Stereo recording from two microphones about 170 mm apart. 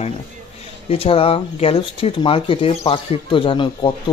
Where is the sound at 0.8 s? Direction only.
35° left (ahead or behind).